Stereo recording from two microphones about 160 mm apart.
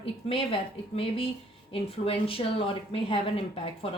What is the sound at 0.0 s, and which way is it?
Speech, 35° left (ahead or behind).